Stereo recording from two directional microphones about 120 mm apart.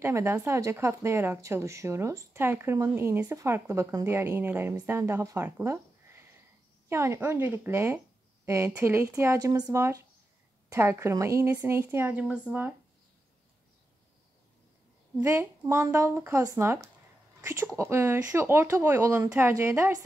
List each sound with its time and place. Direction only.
0.0 s a woman's voice: 20° right (ahead or behind)
15.2 s a woman's voice: 25° right (ahead or behind)